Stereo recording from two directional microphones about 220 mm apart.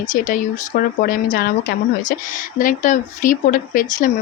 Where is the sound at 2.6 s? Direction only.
35° left (ahead or behind).